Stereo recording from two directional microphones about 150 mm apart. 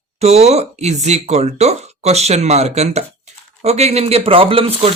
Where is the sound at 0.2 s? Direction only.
45° right (ahead or behind).